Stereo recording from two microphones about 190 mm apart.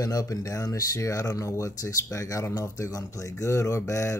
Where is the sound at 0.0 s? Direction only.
20° left (ahead or behind).